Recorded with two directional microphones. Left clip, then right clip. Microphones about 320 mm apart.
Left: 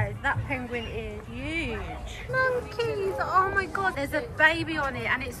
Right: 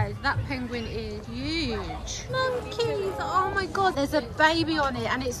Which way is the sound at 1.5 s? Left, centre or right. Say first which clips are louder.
Right 1 dB; right.